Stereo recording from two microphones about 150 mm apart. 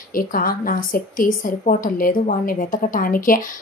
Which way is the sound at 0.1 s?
70° left (ahead or behind).